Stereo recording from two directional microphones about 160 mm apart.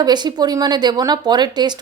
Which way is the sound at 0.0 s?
25° right (ahead or behind).